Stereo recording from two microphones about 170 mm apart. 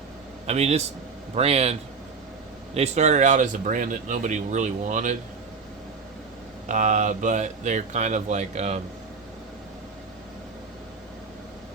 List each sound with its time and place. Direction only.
0.4 s a man's voice: 40° right (ahead or behind)
2.7 s speech: 40° right (ahead or behind)
6.7 s speech: 45° right (ahead or behind)